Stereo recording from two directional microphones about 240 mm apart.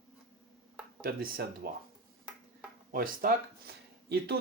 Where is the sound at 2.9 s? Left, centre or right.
Right.